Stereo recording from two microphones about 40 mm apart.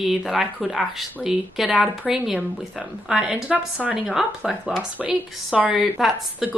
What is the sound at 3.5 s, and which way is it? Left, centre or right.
Speech, right.